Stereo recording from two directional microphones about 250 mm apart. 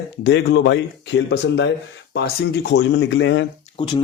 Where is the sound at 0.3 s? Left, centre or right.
Left.